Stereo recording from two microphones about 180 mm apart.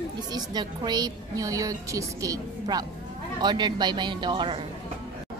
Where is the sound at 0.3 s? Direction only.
25° right (ahead or behind).